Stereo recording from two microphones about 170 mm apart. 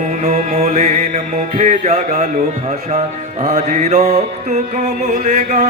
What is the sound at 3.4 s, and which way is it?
Mantra, 40° right (ahead or behind).